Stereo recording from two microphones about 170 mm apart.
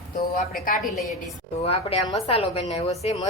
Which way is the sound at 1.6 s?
35° left (ahead or behind).